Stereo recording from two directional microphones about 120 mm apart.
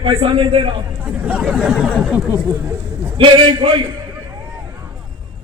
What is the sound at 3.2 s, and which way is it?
Speech, 40° right (ahead or behind).